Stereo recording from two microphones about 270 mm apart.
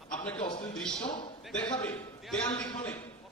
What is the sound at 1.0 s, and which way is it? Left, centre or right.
Speech, centre.